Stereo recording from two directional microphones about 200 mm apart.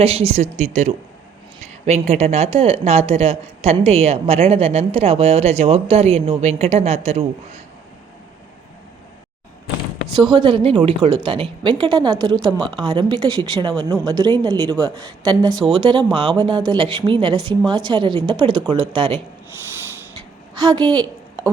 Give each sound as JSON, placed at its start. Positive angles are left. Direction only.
{"t": 0.0, "sound": "speech", "side_deg": -30}
{"t": 10.3, "sound": "a woman's voice", "side_deg": -25}
{"t": 20.6, "sound": "a woman's voice", "side_deg": -20}